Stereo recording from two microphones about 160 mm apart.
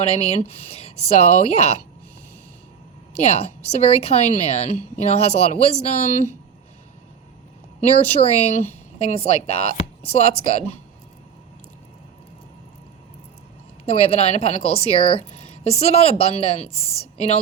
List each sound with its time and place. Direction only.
0.0 s a woman's voice: 40° left (ahead or behind)
3.2 s a woman's voice: 40° left (ahead or behind)
7.9 s a woman's voice: 40° left (ahead or behind)
13.8 s a woman's voice: 40° left (ahead or behind)